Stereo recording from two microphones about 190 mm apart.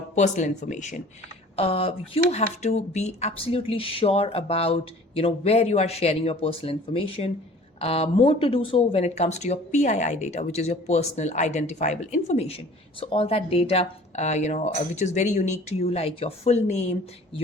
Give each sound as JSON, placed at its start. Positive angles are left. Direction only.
{"t": 0.2, "sound": "speech", "side_deg": 40}